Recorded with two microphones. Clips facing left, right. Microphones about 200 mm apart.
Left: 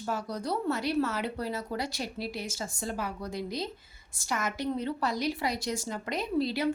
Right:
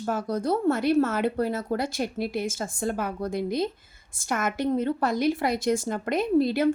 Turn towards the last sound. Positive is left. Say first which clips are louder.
# right 7 dB
turn(degrees=-50)  # may be behind; listen again after turning